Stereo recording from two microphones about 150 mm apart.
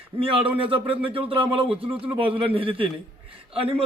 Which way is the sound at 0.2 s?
35° right (ahead or behind).